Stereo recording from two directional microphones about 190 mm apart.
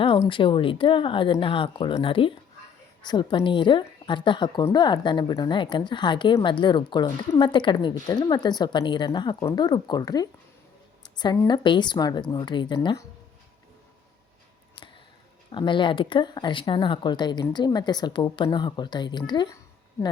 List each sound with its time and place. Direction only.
0.0 s a woman's voice: 25° left (ahead or behind)
14.8 s a sound: 25° left (ahead or behind)
15.5 s a woman's voice: 25° left (ahead or behind)